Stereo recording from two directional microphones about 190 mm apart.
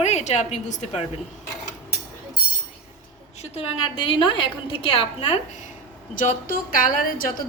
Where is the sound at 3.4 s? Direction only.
30° left (ahead or behind).